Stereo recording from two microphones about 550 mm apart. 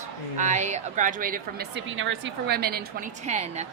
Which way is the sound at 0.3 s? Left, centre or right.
Centre.